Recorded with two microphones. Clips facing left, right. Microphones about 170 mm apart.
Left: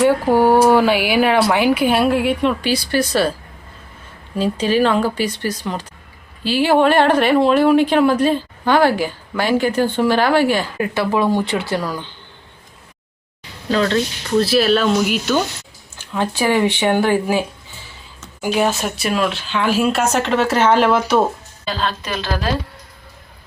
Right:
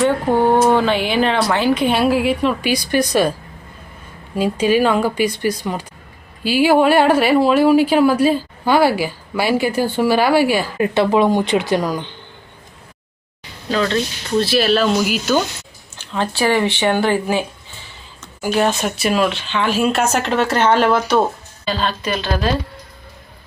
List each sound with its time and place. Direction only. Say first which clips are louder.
0.0 s speech: left 2 dB; 10° left (ahead or behind)
2.6 s speech: right 1 dB; 15° right (ahead or behind)
4.4 s speech: right 1 dB; 10° right (ahead or behind)
10.8 s speech: right 4 dB; 25° right (ahead or behind)
13.7 s speech: left 1 dB; 40° left (ahead or behind)
14.4 s speech: even; centre (ahead or behind)
16.1 s speech: even; 10° left (ahead or behind)
18.5 s speech: right 1 dB; 5° left (ahead or behind)